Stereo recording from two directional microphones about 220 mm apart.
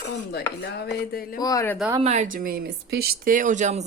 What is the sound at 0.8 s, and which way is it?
Speech, 45° left (ahead or behind).